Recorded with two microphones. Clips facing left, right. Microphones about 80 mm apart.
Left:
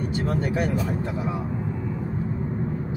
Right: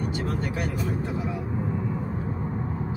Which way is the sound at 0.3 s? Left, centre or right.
Left.